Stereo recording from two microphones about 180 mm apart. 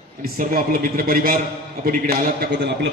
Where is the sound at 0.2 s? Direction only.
55° right (ahead or behind).